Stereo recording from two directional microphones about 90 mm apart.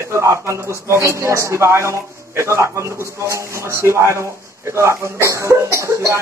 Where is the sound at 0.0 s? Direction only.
30° right (ahead or behind).